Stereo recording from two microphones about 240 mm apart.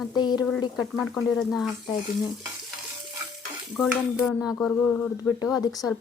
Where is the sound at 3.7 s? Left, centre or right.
Centre.